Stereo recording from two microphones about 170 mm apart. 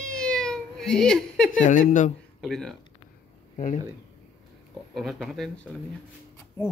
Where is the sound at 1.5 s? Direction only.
50° left (ahead or behind).